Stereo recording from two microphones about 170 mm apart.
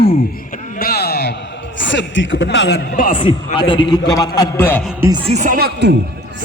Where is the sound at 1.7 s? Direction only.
90° left.